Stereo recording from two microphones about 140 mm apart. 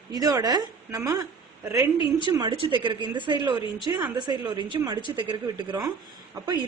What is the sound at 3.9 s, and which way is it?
Speech, 15° right (ahead or behind).